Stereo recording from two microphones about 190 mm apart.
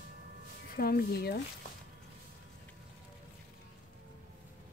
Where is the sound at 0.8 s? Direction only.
55° left (ahead or behind).